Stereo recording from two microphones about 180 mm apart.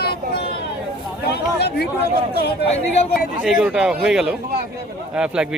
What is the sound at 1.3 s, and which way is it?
Speech, 65° left (ahead or behind).